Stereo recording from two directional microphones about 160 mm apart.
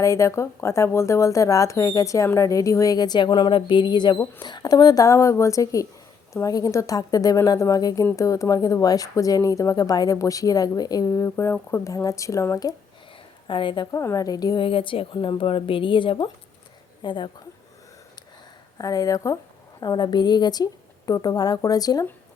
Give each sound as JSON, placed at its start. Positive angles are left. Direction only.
{"t": 0.0, "sound": "speech", "side_deg": 20}
{"t": 13.5, "sound": "a woman's voice", "side_deg": 30}
{"t": 13.9, "sound": "a woman's voice", "side_deg": 20}
{"t": 18.8, "sound": "speech", "side_deg": 20}